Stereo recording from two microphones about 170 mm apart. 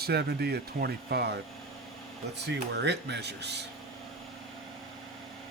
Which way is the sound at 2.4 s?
80° right.